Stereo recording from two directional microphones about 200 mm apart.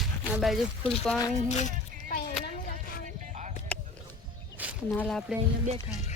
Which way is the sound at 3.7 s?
5° left (ahead or behind).